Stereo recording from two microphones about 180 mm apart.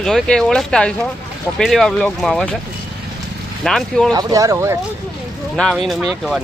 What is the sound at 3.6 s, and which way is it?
Speech, centre (ahead or behind).